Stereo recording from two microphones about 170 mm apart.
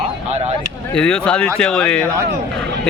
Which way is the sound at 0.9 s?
5° left (ahead or behind).